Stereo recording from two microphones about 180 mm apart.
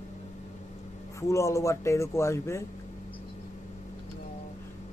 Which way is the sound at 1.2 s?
15° left (ahead or behind).